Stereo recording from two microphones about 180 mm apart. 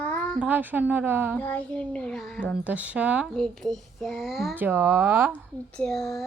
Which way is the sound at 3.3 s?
5° left (ahead or behind).